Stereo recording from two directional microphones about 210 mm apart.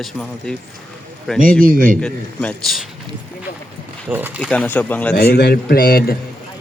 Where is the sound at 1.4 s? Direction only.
40° right (ahead or behind).